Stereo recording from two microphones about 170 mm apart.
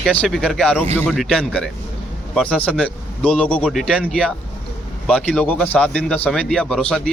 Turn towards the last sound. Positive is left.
turn(degrees=5)  # may be behind; listen again after turning